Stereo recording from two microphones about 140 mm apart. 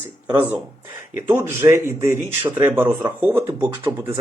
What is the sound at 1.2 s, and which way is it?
Speech, 20° right (ahead or behind).